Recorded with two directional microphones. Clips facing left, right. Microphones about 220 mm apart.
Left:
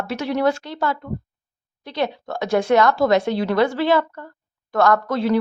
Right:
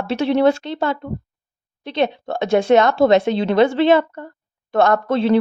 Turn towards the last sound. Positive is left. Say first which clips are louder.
# right 2 dB
turn(degrees=-25)  # may be behind; listen again after turning